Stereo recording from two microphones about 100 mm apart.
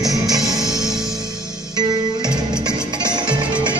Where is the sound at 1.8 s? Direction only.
45° right (ahead or behind).